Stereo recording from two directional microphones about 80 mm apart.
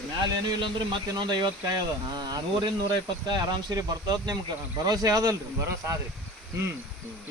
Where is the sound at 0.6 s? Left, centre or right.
Right.